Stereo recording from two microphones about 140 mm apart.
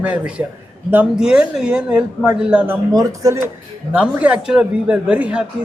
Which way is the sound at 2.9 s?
25° right (ahead or behind).